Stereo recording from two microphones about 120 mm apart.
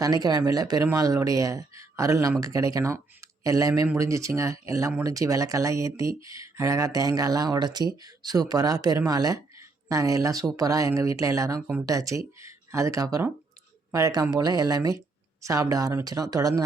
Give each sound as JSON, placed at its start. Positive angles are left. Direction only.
{"t": 0.0, "sound": "speech", "side_deg": -30}